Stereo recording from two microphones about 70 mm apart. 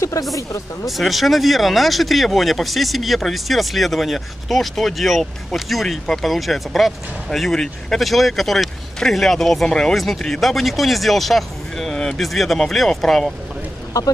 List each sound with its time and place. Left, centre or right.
0.3 s speech: left
0.8 s speech: centre